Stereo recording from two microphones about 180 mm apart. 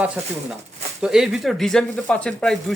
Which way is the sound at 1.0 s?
5° right (ahead or behind).